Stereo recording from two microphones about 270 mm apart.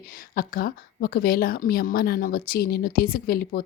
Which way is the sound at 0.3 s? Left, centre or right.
Left.